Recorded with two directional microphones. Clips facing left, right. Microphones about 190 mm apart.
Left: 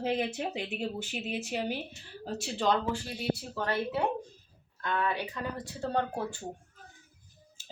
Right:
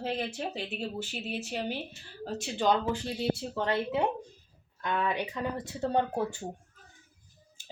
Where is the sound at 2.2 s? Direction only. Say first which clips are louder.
Right 1 dB; 5° right (ahead or behind).